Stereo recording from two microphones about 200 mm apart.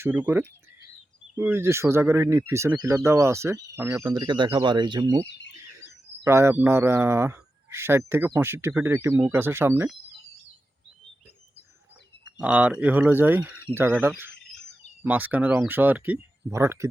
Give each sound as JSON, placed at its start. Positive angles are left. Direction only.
{"t": 0.0, "sound": "speech", "side_deg": -10}
{"t": 5.5, "sound": "a sound", "side_deg": -15}
{"t": 6.2, "sound": "speech", "side_deg": -15}
{"t": 12.4, "sound": "speech", "side_deg": -5}